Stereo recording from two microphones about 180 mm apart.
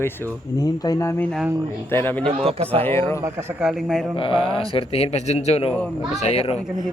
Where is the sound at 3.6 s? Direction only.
Centre (ahead or behind).